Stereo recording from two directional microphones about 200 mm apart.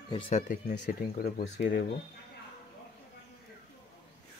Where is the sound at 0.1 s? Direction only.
35° left (ahead or behind); by 1.9 s 50° left (ahead or behind).